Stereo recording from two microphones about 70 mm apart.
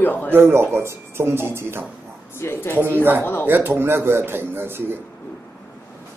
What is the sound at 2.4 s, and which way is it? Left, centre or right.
Speech, left.